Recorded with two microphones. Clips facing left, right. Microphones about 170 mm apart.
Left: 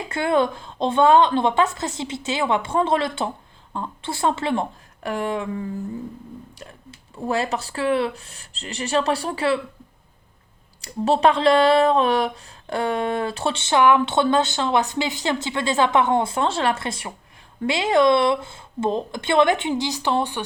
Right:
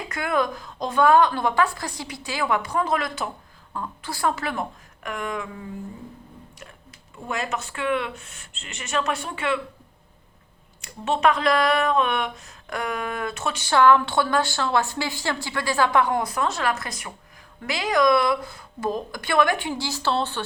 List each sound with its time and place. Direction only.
0.1 s speech: 30° left (ahead or behind)
7.3 s speech: 35° left (ahead or behind)
10.8 s speech: 35° left (ahead or behind); by 20.4 s 15° left (ahead or behind)